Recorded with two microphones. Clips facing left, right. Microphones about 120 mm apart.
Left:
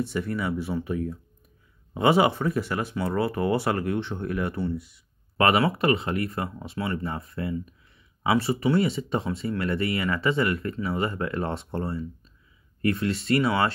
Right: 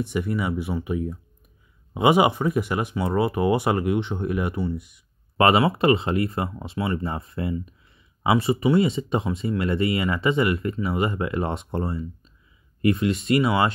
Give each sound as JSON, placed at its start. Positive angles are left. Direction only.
{"t": 0.0, "sound": "speech", "side_deg": -15}